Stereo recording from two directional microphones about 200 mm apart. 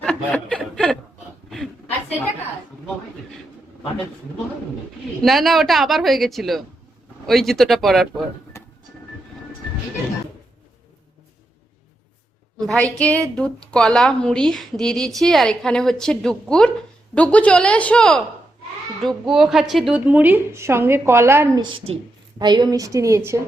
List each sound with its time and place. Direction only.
0.0 s chuckle: 5° left (ahead or behind)
1.5 s a sound: centre (ahead or behind)
5.2 s a woman's voice: centre (ahead or behind)
8.5 s music: 15° left (ahead or behind)
12.5 s a woman's voice: 5° left (ahead or behind); by 23.4 s 15° right (ahead or behind)